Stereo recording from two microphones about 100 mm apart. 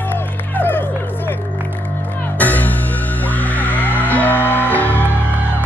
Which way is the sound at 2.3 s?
15° left (ahead or behind).